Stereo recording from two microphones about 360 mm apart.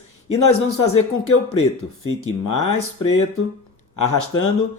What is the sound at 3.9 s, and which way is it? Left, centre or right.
Speech, left.